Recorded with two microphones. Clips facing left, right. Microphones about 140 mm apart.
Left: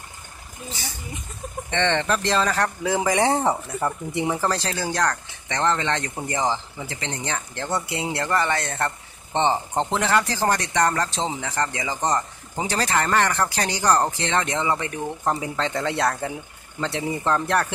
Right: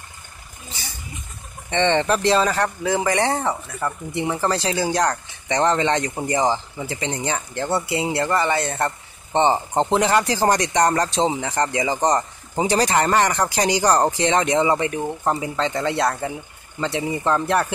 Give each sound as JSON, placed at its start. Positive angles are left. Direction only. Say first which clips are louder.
{"t": 1.7, "sound": "speech", "louder": "right 4 dB", "side_deg": -10}
{"t": 2.8, "sound": "speech", "louder": "even", "side_deg": 10}
{"t": 4.4, "sound": "speech", "louder": "right 3 dB", "side_deg": -5}
{"t": 15.2, "sound": "speech", "louder": "right 1 dB", "side_deg": 0}